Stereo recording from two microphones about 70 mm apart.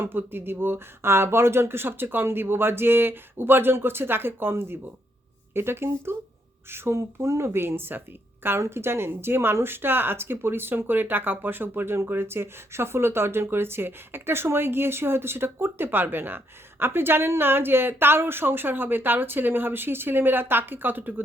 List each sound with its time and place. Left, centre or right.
0.0 s speech: right